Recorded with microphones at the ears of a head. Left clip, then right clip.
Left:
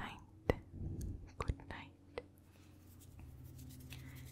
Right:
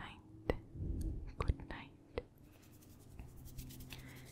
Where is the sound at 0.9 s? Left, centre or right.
Centre.